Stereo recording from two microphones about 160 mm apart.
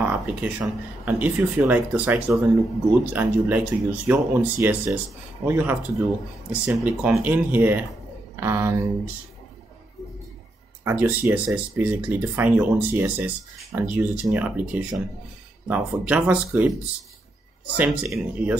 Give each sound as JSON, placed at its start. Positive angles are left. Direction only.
{"t": 0.0, "sound": "speech", "side_deg": -10}
{"t": 10.8, "sound": "speech", "side_deg": -15}
{"t": 17.7, "sound": "speech", "side_deg": -5}